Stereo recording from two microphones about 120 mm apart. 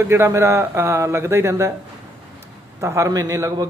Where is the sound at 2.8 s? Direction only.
25° right (ahead or behind).